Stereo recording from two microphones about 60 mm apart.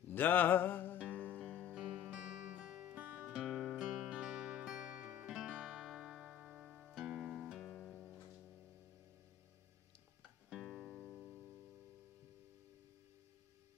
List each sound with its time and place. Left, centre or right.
0.1 s music: left
1.8 s music: centre
2.9 s music: right
3.3 s music: centre
10.5 s music: centre